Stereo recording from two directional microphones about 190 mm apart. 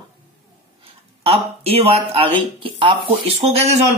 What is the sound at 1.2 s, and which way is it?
Speech, 30° right (ahead or behind).